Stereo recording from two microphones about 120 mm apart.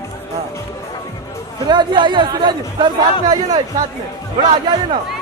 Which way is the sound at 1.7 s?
40° right (ahead or behind).